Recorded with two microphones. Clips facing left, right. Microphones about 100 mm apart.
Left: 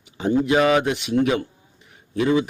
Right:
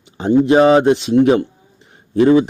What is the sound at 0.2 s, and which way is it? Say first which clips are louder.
Speech: right 7 dB; 30° right (ahead or behind).